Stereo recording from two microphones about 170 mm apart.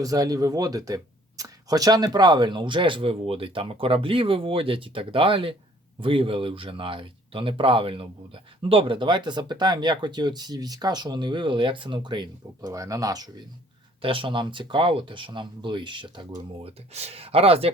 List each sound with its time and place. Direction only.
0.0 s speech: 20° right (ahead or behind)